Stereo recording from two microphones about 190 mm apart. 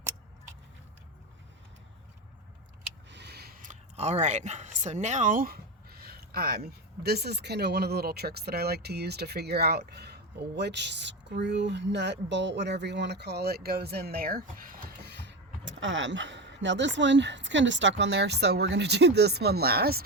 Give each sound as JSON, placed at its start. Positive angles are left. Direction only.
{"t": 3.1, "sound": "speech", "side_deg": -60}